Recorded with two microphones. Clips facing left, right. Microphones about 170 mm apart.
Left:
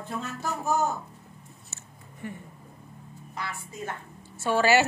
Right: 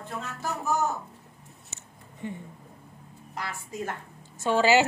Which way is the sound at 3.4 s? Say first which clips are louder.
Right 2 dB; 40° right (ahead or behind).